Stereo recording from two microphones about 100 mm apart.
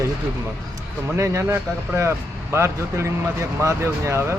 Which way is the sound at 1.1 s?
30° right (ahead or behind).